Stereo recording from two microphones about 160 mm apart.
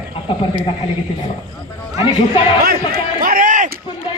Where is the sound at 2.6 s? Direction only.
65° right (ahead or behind).